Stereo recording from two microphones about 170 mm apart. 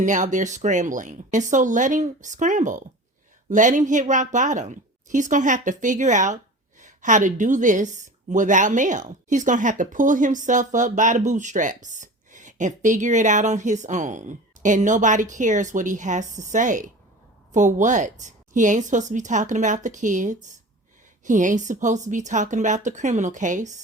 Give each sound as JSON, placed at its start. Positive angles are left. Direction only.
{"t": 0.0, "sound": "a woman's voice", "side_deg": -45}